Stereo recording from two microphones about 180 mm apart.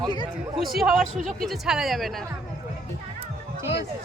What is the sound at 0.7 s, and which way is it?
Speech, centre (ahead or behind).